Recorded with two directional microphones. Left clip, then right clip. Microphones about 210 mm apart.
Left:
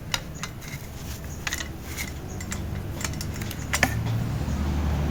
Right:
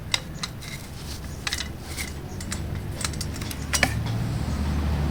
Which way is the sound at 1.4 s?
Centre (ahead or behind).